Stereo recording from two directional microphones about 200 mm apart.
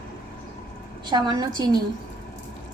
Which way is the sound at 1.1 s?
20° right (ahead or behind).